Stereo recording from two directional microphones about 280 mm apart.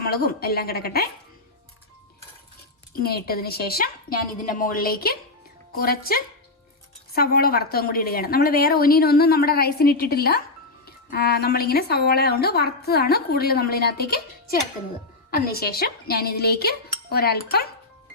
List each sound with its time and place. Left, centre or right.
0.0 s a woman's voice: left
3.0 s a woman's voice: left